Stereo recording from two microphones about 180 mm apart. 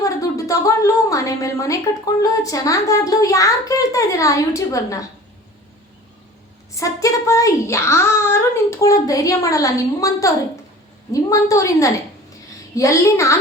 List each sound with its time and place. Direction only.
0.0 s a woman's voice: 20° left (ahead or behind)
6.7 s a sound: 15° left (ahead or behind)
8.8 s a woman's voice: 20° left (ahead or behind)